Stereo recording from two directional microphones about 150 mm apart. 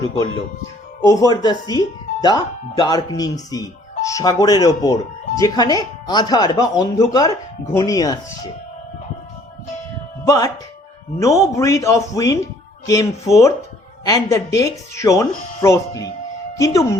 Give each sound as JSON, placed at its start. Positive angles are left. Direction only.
{"t": 1.3, "sound": "speech", "side_deg": 25}
{"t": 10.2, "sound": "speech", "side_deg": 25}